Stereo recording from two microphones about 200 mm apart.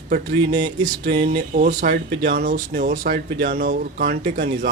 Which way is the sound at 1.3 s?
45° right (ahead or behind).